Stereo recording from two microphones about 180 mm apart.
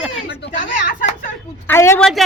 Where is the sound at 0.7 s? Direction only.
50° left (ahead or behind).